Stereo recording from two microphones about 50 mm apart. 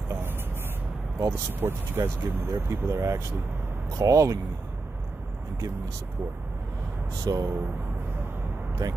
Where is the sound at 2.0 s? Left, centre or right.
Right.